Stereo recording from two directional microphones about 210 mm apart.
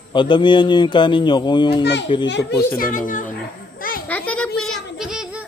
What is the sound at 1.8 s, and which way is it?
Speech, 55° left (ahead or behind).